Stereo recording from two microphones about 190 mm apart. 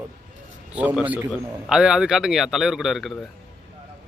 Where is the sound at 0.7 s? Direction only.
5° right (ahead or behind).